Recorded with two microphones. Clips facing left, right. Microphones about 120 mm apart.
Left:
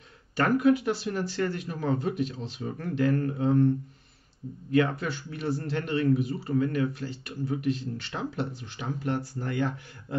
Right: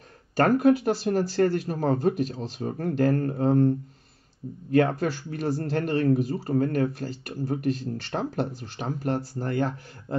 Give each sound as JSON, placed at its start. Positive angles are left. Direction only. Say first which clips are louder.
{"t": 0.4, "sound": "speech", "louder": "right 3 dB", "side_deg": -45}